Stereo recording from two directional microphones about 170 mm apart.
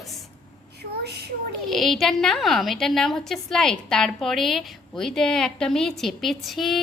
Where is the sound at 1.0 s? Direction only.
75° right (ahead or behind).